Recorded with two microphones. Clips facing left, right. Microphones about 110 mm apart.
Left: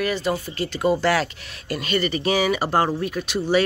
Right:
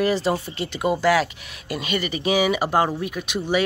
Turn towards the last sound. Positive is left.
turn(degrees=-15)  # may be behind; listen again after turning